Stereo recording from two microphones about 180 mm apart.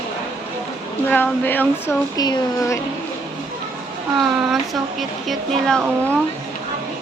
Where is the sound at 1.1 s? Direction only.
10° left (ahead or behind).